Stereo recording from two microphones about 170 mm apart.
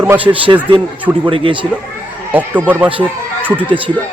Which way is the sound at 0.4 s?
30° right (ahead or behind).